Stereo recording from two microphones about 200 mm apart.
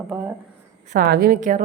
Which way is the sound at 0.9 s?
50° right (ahead or behind).